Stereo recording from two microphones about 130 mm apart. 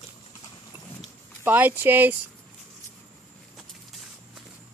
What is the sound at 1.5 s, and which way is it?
Speech, 15° right (ahead or behind).